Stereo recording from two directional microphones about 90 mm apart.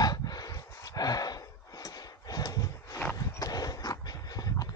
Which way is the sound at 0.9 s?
45° left (ahead or behind).